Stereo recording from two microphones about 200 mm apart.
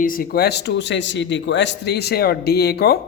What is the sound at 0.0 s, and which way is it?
A man's voice, 45° left (ahead or behind).